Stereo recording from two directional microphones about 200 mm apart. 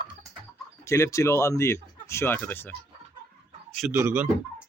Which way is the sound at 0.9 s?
15° left (ahead or behind).